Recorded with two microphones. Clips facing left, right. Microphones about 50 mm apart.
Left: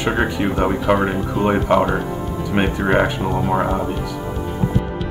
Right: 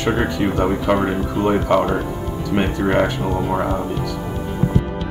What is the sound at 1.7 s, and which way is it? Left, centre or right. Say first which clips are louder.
Speech: left 1 dB; centre.